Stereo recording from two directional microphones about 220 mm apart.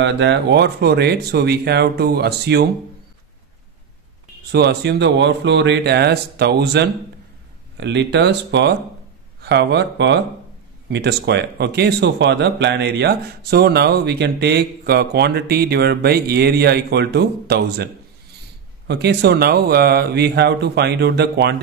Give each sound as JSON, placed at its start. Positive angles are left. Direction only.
{"t": 0.0, "sound": "speech", "side_deg": -50}
{"t": 4.5, "sound": "speech", "side_deg": -50}
{"t": 18.9, "sound": "speech", "side_deg": -50}